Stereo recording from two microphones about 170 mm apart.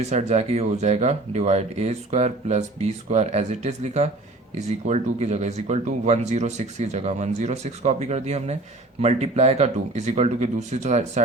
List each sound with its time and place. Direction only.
0.0 s speech: 40° right (ahead or behind)